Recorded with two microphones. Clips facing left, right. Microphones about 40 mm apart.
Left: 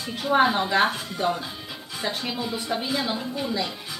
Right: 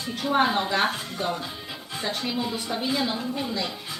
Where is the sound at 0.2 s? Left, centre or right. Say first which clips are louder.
Left 2 dB; centre.